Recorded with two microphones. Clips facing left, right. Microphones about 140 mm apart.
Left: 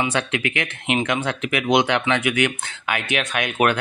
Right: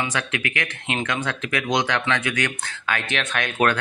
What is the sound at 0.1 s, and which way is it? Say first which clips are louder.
Speech: left 4 dB; 25° left (ahead or behind).